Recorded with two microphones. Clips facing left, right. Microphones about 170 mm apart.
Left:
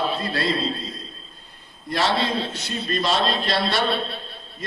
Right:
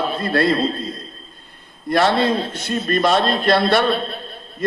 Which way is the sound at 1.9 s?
50° right (ahead or behind).